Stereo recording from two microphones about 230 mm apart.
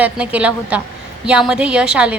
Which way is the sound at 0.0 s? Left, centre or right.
Centre.